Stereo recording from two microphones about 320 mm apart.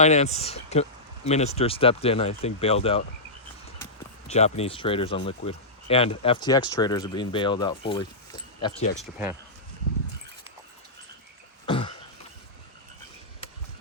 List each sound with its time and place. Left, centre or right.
0.0 s speech: left
4.3 s speech: centre
9.0 s speech: centre
11.6 s a sound: centre